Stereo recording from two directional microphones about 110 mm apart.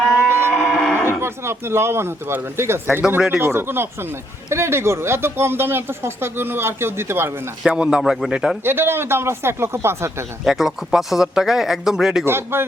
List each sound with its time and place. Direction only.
0.3 s a sound: 20° right (ahead or behind)
0.5 s moo: centre (ahead or behind)
1.2 s speech: 25° right (ahead or behind)
7.7 s speech: 10° right (ahead or behind)
8.6 s speech: 20° right (ahead or behind)
10.4 s speech: 5° right (ahead or behind)
12.2 s speech: 20° right (ahead or behind)